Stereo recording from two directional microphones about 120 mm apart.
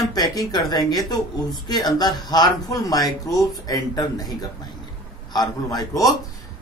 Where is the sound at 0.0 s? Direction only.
35° left (ahead or behind).